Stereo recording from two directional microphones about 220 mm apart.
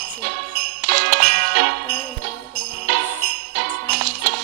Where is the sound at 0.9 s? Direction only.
40° right (ahead or behind).